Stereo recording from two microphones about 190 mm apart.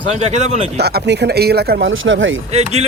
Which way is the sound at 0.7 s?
60° right (ahead or behind).